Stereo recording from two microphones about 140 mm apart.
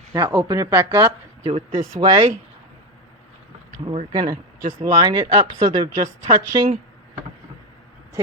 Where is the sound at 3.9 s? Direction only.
40° right (ahead or behind).